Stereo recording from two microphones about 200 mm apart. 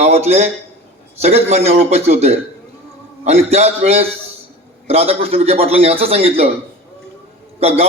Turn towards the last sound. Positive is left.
turn(degrees=-30)  # may be behind; listen again after turning